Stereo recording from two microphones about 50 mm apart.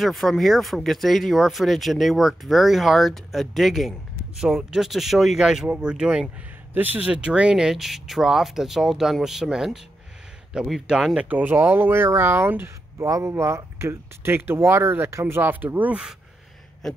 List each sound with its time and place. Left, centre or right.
0.0 s speech: centre
6.7 s speech: right
7.0 s speech: right
7.7 s speech: centre
11.1 s speech: right
13.0 s speech: right
15.5 s speech: right